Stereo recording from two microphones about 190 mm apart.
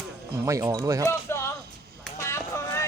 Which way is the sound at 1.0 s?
15° left (ahead or behind).